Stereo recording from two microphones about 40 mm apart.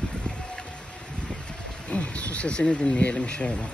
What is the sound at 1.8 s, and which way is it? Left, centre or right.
Speech, left.